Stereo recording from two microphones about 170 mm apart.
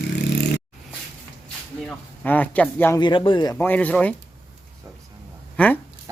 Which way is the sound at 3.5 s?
10° left (ahead or behind).